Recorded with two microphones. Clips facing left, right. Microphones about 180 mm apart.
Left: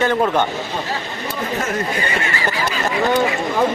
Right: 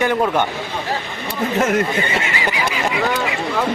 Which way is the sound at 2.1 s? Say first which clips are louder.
Even; 20° right (ahead or behind).